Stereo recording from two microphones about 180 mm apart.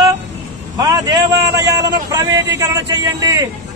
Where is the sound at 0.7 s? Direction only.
20° right (ahead or behind).